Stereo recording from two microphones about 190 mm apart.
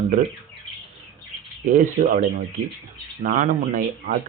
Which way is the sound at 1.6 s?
45° right (ahead or behind).